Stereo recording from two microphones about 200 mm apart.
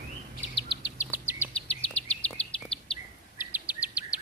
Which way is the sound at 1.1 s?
15° right (ahead or behind).